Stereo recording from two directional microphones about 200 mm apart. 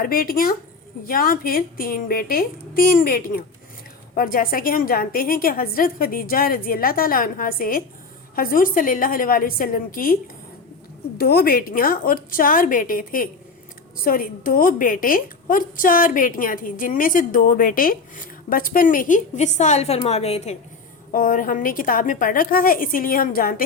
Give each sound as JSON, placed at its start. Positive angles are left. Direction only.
{"t": 0.0, "sound": "a woman's voice", "side_deg": 45}
{"t": 11.2, "sound": "a woman's voice", "side_deg": 50}
{"t": 21.1, "sound": "a woman's voice", "side_deg": 45}